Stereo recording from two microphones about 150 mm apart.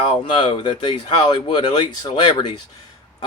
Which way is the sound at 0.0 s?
35° left (ahead or behind).